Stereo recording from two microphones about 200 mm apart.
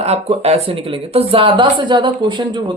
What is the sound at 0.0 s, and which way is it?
Speech, 30° right (ahead or behind).